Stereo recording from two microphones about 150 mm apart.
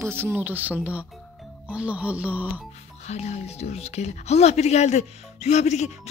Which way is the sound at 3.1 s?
50° left (ahead or behind).